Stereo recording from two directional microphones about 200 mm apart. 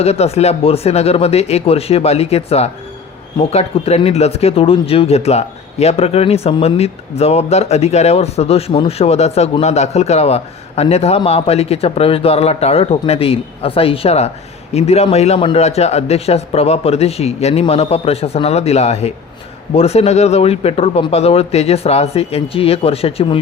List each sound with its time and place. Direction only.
0.0 s speech: 30° left (ahead or behind)